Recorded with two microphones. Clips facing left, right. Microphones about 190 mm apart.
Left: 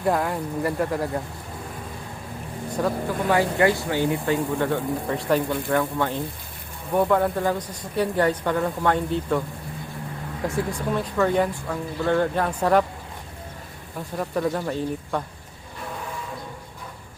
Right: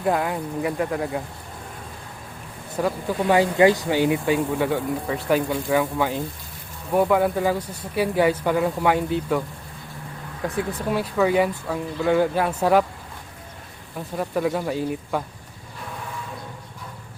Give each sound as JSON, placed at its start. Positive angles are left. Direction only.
{"t": 0.0, "sound": "speech", "side_deg": 0}
{"t": 2.8, "sound": "speech", "side_deg": -5}
{"t": 3.2, "sound": "speech", "side_deg": -15}
{"t": 10.4, "sound": "speech", "side_deg": 0}
{"t": 14.2, "sound": "speech", "side_deg": -5}